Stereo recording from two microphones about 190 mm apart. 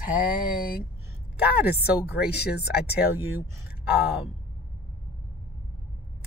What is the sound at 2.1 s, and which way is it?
Speech, 60° left (ahead or behind).